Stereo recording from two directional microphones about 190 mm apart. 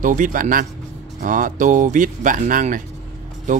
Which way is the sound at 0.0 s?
45° right (ahead or behind).